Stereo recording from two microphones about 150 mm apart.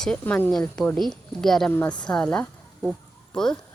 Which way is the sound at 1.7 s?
15° left (ahead or behind).